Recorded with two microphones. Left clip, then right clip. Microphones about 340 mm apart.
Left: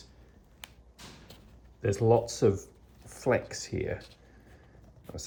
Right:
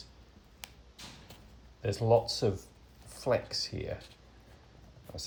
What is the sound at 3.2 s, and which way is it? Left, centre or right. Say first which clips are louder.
Speech: left 2 dB; centre.